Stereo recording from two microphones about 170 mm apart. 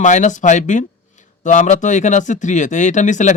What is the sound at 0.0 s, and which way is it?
Speech, 45° left (ahead or behind).